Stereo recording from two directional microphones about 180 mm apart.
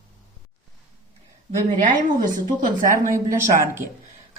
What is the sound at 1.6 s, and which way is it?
Speech, 45° right (ahead or behind).